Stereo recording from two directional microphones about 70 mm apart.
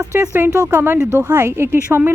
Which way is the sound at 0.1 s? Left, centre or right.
Right.